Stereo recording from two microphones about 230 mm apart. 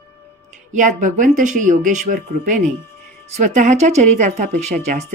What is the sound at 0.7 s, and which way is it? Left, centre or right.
A woman's voice, right.